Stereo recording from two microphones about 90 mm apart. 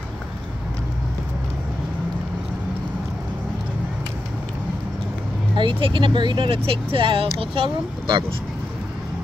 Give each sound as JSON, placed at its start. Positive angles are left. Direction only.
{"t": 5.6, "sound": "speech", "side_deg": -70}